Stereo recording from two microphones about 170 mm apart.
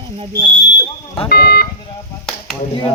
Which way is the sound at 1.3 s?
70° left (ahead or behind).